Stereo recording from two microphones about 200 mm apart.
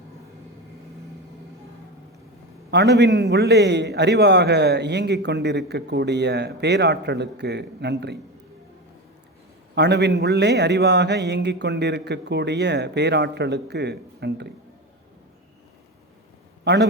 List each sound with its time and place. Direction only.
2.6 s a man's voice: 55° right (ahead or behind)
9.7 s a man's voice: 60° right (ahead or behind)
16.7 s a man's voice: 60° right (ahead or behind)